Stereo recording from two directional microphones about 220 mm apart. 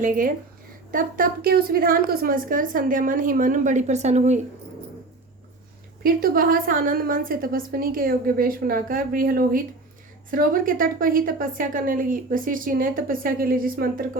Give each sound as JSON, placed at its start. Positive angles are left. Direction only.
{"t": 0.0, "sound": "a woman's voice", "side_deg": -40}
{"t": 6.0, "sound": "a woman's voice", "side_deg": -40}